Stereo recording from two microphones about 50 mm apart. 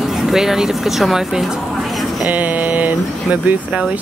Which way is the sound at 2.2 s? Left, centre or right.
Right.